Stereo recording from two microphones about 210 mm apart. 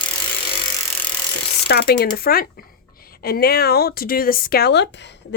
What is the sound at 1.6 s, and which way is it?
Ratchet, 50° left (ahead or behind).